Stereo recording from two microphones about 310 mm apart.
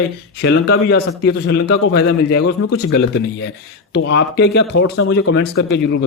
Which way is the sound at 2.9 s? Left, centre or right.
Left.